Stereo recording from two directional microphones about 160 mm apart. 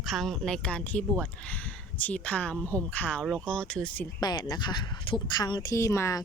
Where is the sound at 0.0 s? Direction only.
Centre (ahead or behind).